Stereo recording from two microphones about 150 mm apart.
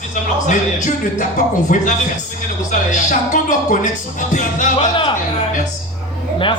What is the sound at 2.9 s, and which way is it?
A man's voice, 60° left (ahead or behind).